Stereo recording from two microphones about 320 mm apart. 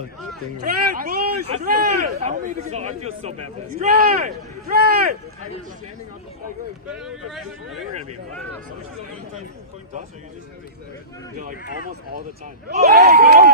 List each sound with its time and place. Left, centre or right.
0.9 s a man's voice: right
6.9 s speech: centre
12.6 s a man's voice: right